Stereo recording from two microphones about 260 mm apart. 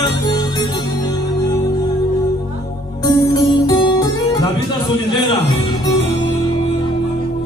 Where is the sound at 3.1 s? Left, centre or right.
Centre.